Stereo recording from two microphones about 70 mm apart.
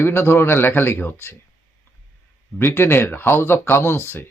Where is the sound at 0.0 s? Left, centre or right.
Left.